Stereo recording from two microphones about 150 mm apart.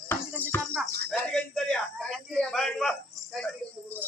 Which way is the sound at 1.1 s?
5° left (ahead or behind).